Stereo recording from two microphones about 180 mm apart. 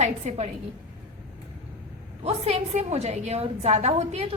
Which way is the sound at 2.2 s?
35° right (ahead or behind).